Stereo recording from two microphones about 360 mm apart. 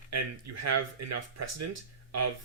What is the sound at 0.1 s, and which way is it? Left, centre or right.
Speech, right.